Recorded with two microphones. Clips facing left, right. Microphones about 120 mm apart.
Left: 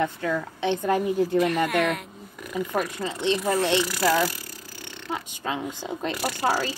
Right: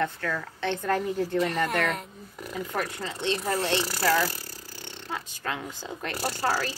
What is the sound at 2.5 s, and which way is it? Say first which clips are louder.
Speech: left 5 dB; 15° left (ahead or behind).